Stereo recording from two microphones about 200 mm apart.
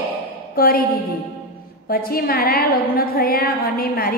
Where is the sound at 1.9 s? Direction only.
50° left (ahead or behind).